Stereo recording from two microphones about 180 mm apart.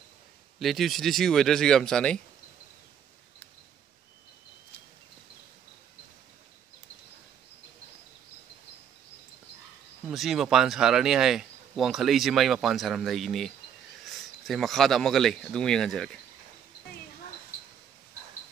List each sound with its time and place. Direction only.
0.6 s speech: centre (ahead or behind)
10.0 s speech: centre (ahead or behind)